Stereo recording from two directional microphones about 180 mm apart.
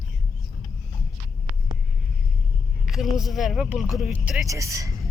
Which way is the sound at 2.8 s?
Centre (ahead or behind).